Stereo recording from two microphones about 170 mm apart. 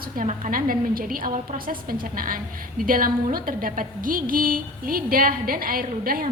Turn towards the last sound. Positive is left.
turn(degrees=-60)  # may be behind; listen again after turning